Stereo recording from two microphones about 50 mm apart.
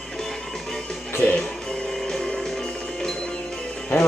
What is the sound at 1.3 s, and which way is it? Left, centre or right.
Music, centre.